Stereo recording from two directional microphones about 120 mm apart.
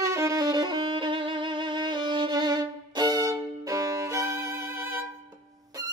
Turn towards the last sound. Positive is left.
turn(degrees=-20)  # may be behind; listen again after turning